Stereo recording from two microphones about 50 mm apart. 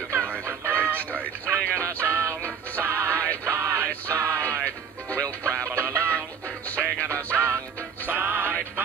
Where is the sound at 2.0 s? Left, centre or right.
Right.